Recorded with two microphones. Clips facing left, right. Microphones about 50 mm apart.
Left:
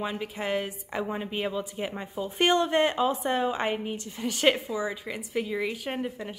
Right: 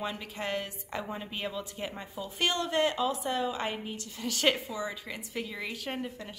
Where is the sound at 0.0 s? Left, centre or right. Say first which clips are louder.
Left 4 dB; centre.